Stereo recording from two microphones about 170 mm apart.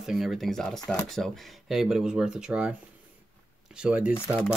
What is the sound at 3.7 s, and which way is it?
Speech, 5° right (ahead or behind).